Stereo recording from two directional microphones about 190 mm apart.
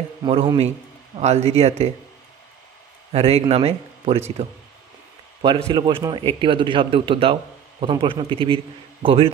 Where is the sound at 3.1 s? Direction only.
30° right (ahead or behind).